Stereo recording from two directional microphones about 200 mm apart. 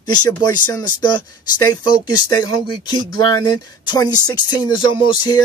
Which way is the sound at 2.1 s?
20° left (ahead or behind).